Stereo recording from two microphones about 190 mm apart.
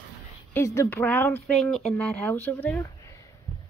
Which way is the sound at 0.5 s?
15° left (ahead or behind).